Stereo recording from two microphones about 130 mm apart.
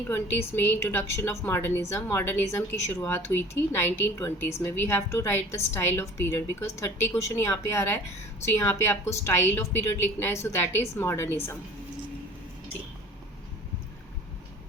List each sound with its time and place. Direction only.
0.1 s a woman's voice: 15° left (ahead or behind)